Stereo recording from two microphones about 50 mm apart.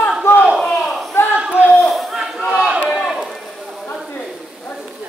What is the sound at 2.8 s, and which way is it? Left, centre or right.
Run, centre.